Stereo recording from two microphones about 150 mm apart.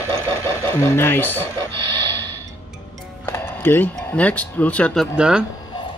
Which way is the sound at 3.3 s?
15° left (ahead or behind).